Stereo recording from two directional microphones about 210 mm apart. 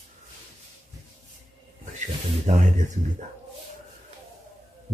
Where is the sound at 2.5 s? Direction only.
35° right (ahead or behind).